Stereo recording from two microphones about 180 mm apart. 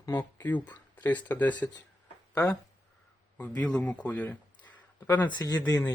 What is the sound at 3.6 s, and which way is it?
Speech, 5° left (ahead or behind).